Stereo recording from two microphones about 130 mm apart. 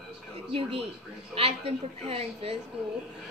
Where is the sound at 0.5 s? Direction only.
45° right (ahead or behind).